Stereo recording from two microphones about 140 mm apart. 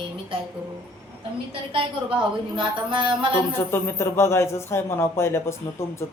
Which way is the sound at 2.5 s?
35° right (ahead or behind).